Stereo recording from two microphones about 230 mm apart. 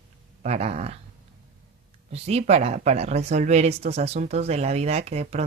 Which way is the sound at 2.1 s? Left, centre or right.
Right.